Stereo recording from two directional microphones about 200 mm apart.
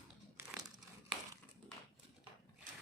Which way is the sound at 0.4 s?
10° right (ahead or behind).